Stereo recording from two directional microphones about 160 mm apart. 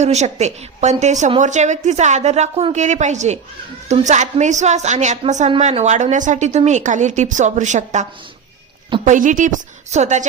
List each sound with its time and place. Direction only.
0.0 s a woman's voice: 45° right (ahead or behind)
9.0 s a woman's voice: 55° right (ahead or behind)